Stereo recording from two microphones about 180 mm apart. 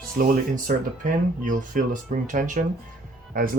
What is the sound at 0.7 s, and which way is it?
Speech, 50° right (ahead or behind).